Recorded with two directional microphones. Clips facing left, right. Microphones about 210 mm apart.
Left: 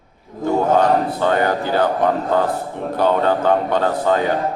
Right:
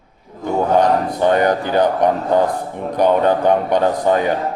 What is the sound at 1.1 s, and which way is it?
Speech, 20° right (ahead or behind).